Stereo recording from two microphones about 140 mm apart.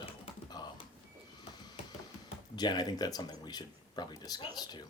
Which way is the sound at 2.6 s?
30° left (ahead or behind).